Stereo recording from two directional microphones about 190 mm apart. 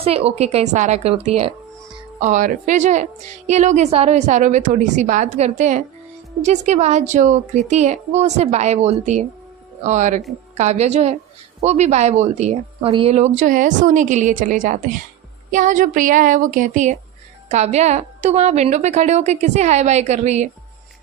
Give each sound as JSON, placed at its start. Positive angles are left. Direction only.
{"t": 0.0, "sound": "a woman's voice", "side_deg": -30}
{"t": 15.5, "sound": "a sound", "side_deg": -40}
{"t": 17.5, "sound": "a woman's voice", "side_deg": -35}